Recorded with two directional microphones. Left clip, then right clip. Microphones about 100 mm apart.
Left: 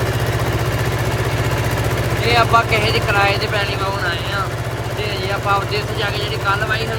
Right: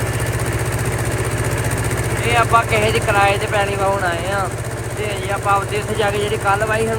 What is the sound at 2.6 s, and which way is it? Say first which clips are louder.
Speech: even; 20° left (ahead or behind).